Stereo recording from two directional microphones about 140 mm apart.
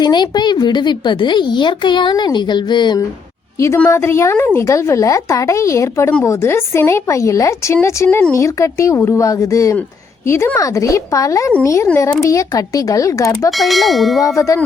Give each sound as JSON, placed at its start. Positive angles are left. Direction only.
{"t": 0.0, "sound": "speech", "side_deg": 30}
{"t": 3.6, "sound": "a woman's voice", "side_deg": 20}
{"t": 13.5, "sound": "bell", "side_deg": 0}
{"t": 14.2, "sound": "a woman's voice", "side_deg": 20}